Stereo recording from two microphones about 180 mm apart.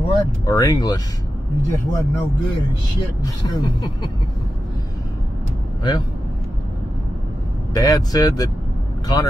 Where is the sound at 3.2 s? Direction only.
25° left (ahead or behind).